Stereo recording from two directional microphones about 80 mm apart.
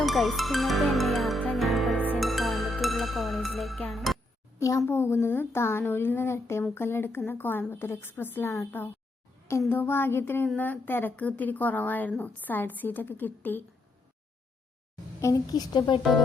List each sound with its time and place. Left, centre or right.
0.0 s music: centre
4.9 s speech: left
15.5 s speech: left